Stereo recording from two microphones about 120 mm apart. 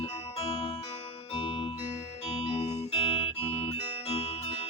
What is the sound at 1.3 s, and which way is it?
Music, 45° left (ahead or behind).